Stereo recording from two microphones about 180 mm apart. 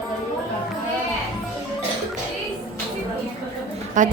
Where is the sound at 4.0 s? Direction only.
45° right (ahead or behind).